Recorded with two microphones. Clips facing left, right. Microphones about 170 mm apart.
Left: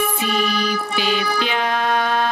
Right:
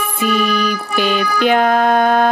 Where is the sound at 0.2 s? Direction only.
50° right (ahead or behind).